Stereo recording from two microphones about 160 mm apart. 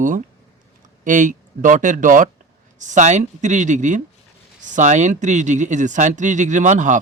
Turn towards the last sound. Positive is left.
turn(degrees=-50)  # may be behind; listen again after turning